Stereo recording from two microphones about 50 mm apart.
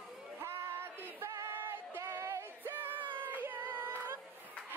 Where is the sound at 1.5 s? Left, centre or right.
Right.